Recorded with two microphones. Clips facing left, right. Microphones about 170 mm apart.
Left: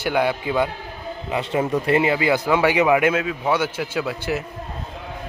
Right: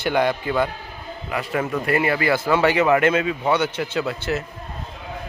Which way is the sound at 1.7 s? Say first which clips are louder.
Left 2 dB; 25° left (ahead or behind).